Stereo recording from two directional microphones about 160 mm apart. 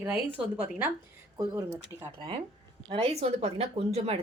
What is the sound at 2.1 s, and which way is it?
Speech, 30° right (ahead or behind).